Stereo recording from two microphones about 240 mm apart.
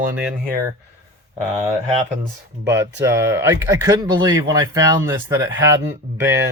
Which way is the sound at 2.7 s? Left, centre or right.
Centre.